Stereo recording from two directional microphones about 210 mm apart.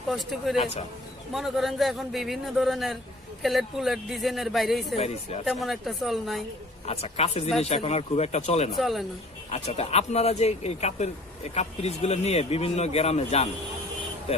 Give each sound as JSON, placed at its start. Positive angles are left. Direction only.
{"t": 0.1, "sound": "a man's voice", "side_deg": 0}
{"t": 0.5, "sound": "speech", "side_deg": 30}
{"t": 1.3, "sound": "a man's voice", "side_deg": 0}
{"t": 4.9, "sound": "speech", "side_deg": 30}
{"t": 5.5, "sound": "a man's voice", "side_deg": 0}
{"t": 6.8, "sound": "speech", "side_deg": 30}
{"t": 8.7, "sound": "a man's voice", "side_deg": 0}
{"t": 9.5, "sound": "speech", "side_deg": 30}